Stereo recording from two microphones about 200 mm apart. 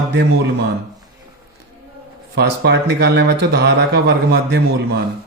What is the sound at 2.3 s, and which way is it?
Speech, 55° right (ahead or behind).